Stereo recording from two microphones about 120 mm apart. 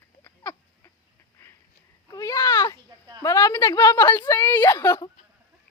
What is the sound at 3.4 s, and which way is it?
Speech, 30° left (ahead or behind).